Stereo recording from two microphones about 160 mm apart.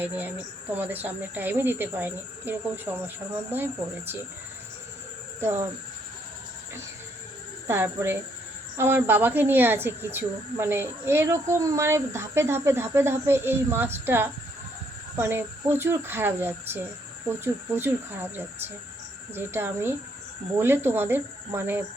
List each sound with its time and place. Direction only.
0.0 s speech: 10° right (ahead or behind)
5.4 s speech: 15° right (ahead or behind)
7.7 s speech: 15° right (ahead or behind)